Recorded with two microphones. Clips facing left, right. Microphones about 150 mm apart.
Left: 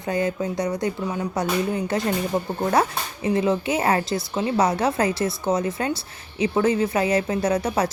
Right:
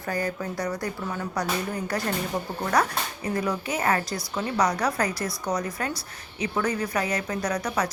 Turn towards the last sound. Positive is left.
turn(degrees=30)  # may be behind; listen again after turning